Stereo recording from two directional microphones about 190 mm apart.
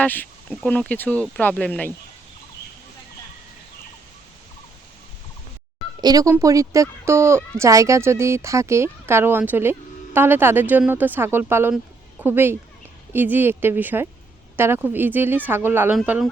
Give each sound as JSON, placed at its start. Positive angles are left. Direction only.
{"t": 0.0, "sound": "speech", "side_deg": 10}
{"t": 6.0, "sound": "speech", "side_deg": -20}